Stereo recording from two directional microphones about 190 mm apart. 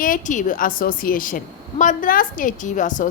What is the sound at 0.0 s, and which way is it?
A woman's voice, 45° left (ahead or behind).